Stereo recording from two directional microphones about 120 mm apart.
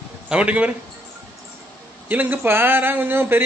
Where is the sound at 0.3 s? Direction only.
10° right (ahead or behind).